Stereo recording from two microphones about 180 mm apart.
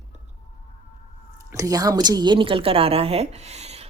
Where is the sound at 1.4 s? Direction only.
20° right (ahead or behind); by 3.8 s 35° right (ahead or behind).